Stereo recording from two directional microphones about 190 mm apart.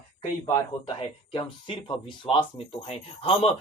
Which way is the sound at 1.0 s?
25° left (ahead or behind).